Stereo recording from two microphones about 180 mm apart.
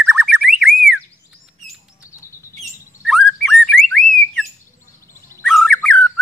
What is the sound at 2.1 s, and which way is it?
Chirp, 15° left (ahead or behind).